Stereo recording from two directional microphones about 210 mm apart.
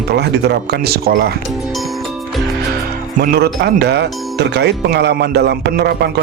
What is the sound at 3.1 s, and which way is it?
Speech, 45° right (ahead or behind).